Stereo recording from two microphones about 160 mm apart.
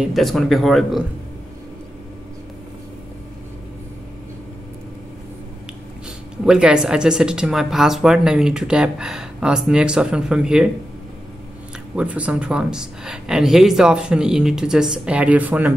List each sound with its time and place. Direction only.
0.0 s speech: centre (ahead or behind)
6.4 s speech: 5° right (ahead or behind)
11.9 s speech: 5° right (ahead or behind)